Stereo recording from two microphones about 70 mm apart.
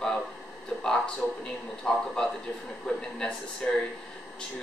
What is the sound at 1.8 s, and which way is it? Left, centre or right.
Speech, centre.